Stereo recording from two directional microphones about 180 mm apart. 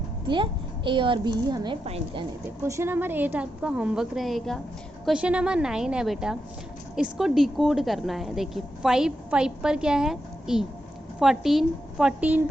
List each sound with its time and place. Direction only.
0.9 s a woman's voice: 25° right (ahead or behind)
2.6 s a woman's voice: 15° right (ahead or behind)